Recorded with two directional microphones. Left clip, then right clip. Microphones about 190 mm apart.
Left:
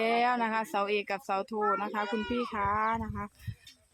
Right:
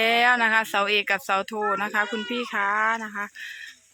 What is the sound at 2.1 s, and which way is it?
Speech, 40° right (ahead or behind).